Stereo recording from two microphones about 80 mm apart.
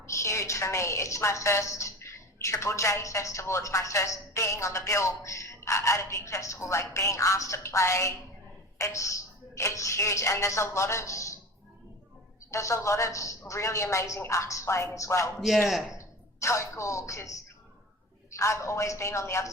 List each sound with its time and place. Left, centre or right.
0.1 s a woman's voice: left
12.5 s a woman's voice: left
15.4 s a man's voice: centre
16.0 s a woman's voice: left